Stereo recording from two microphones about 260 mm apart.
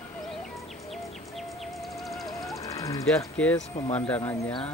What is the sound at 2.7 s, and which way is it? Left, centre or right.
Speech, centre.